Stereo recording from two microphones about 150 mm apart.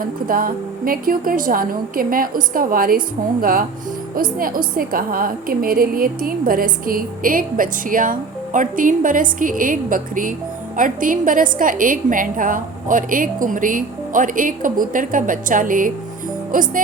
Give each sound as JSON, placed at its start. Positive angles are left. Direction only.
{"t": 0.0, "sound": "a woman's voice", "side_deg": -75}
{"t": 4.1, "sound": "a woman's voice", "side_deg": -70}